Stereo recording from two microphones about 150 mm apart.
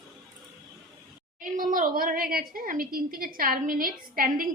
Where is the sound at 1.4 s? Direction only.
65° right (ahead or behind).